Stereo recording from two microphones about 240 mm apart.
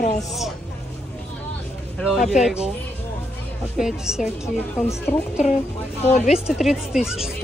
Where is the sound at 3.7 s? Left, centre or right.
Centre.